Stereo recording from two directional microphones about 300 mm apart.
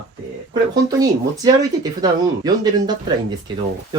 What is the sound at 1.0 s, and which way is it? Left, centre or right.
Speech, centre.